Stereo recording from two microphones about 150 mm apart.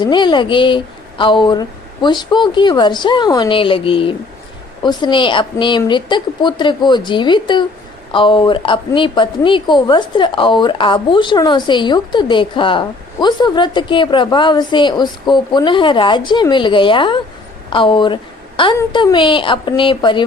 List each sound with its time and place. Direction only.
0.0 s a woman's voice: 30° left (ahead or behind)